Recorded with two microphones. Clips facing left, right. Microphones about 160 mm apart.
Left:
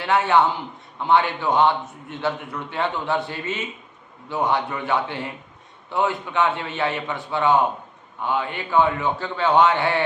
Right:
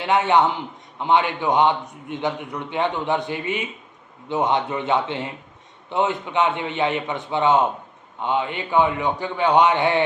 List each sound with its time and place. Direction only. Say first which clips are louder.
0.0 s a man's voice: right 1 dB; 20° right (ahead or behind)